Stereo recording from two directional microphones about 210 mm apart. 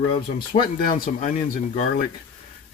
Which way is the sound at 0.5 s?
40° left (ahead or behind).